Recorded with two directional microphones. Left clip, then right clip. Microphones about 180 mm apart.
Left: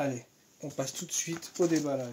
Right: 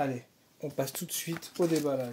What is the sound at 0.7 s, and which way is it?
Speech, 45° right (ahead or behind).